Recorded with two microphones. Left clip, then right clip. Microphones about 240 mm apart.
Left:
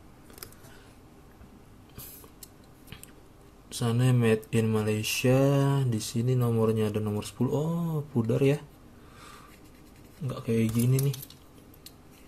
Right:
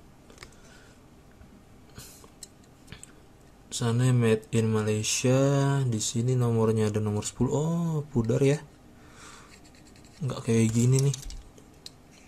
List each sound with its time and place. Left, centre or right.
3.6 s speech: centre
10.2 s speech: centre